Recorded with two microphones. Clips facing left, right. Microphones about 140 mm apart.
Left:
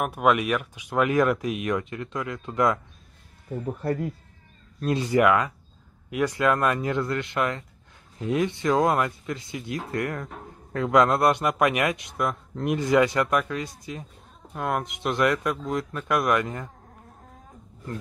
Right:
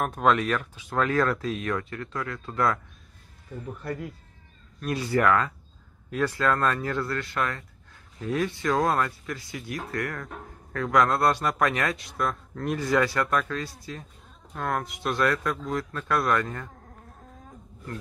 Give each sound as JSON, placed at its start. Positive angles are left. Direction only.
{"t": 0.0, "sound": "speech", "side_deg": 10}
{"t": 3.6, "sound": "speech", "side_deg": 35}
{"t": 4.7, "sound": "speech", "side_deg": 25}